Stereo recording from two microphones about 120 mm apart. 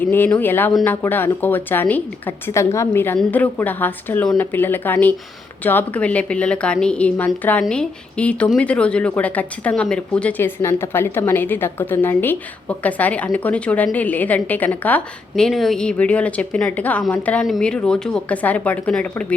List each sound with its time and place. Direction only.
0.0 s speech: 15° left (ahead or behind)
15.4 s speech: centre (ahead or behind)